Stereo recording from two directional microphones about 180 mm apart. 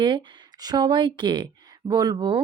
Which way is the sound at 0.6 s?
25° right (ahead or behind).